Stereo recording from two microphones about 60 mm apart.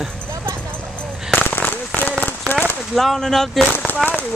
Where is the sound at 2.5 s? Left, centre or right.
Left.